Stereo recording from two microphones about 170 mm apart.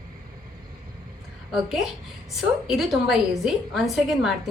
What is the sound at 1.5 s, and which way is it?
A woman's voice, centre (ahead or behind).